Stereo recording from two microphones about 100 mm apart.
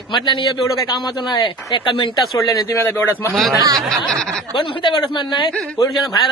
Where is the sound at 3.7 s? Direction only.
5° left (ahead or behind).